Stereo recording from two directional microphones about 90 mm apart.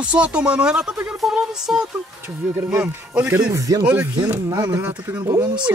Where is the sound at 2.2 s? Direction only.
25° right (ahead or behind).